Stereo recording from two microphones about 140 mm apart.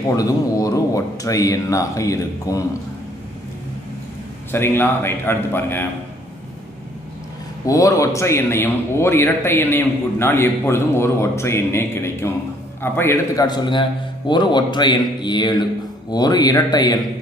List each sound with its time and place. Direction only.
0.1 s speech: 25° left (ahead or behind)
4.5 s a man's voice: 15° left (ahead or behind)
7.6 s a man's voice: 25° left (ahead or behind)
13.5 s a man's voice: 35° left (ahead or behind)